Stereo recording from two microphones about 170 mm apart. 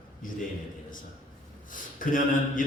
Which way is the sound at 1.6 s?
50° left (ahead or behind).